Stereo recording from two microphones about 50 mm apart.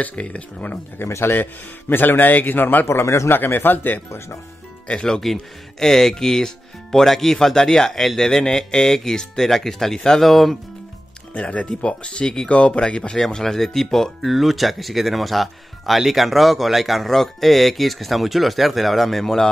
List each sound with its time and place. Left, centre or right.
0.0 s speech: left
1.0 s a man's voice: left
1.3 s a man's voice: left
3.3 s a man's voice: left
4.8 s speech: centre
5.2 s speech: centre
11.3 s speech: left
13.2 s speech: centre
14.2 s speech: centre